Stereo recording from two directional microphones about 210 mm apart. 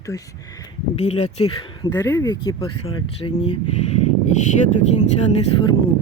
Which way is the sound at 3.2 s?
30° left (ahead or behind).